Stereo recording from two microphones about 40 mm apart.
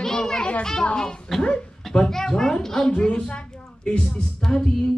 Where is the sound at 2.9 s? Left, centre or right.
Left.